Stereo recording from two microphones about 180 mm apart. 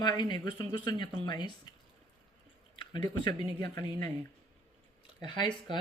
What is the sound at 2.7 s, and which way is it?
Speech, 25° left (ahead or behind).